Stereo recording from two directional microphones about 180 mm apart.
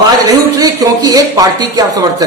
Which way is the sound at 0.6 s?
20° right (ahead or behind).